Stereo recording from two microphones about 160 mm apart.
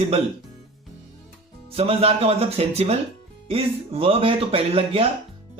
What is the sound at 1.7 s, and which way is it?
Speech, 35° right (ahead or behind).